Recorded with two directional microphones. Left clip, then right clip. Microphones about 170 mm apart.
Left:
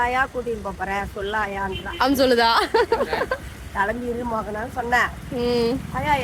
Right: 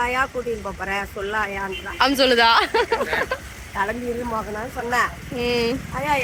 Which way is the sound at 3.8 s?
20° left (ahead or behind).